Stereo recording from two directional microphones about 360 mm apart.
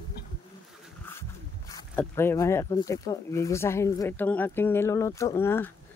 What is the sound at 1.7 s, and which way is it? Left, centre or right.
Speech, centre.